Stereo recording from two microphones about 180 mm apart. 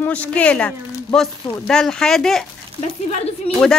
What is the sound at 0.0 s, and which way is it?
A man's voice, 5° left (ahead or behind).